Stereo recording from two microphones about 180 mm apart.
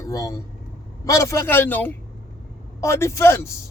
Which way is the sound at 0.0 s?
20° left (ahead or behind).